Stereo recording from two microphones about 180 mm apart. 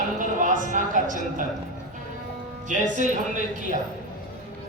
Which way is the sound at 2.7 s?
45° right (ahead or behind).